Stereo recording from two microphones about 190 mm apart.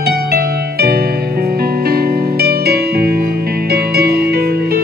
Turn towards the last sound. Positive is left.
turn(degrees=-55)  # may be behind; listen again after turning